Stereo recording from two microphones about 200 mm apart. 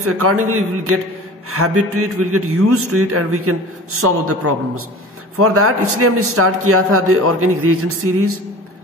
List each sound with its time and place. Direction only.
0.0 s a man's voice: 90° right